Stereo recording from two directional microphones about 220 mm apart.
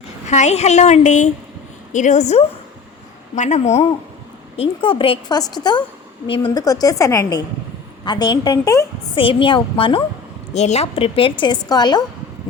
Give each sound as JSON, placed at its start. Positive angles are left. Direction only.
{"t": 0.3, "sound": "a woman's voice", "side_deg": 30}